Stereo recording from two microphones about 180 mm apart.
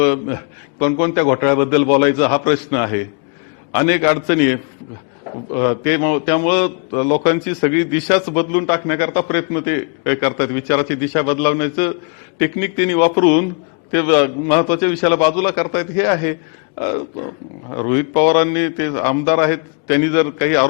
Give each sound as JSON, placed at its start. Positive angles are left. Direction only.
{"t": 0.0, "sound": "speech", "side_deg": 15}